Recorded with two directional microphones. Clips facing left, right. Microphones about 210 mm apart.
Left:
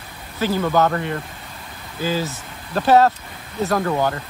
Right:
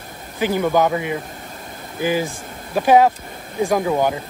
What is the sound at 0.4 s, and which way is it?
Speech, 15° right (ahead or behind).